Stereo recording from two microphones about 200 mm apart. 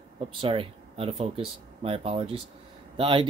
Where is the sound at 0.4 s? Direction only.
25° right (ahead or behind).